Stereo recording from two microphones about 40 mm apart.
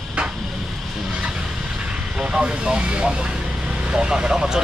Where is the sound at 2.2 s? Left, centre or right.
Right.